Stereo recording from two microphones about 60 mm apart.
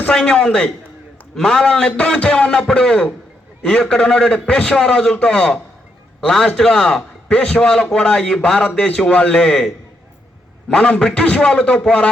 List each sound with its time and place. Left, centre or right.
0.1 s a man's voice: centre